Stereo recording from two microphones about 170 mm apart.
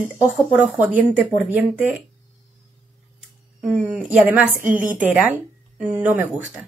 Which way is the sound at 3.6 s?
5° right (ahead or behind).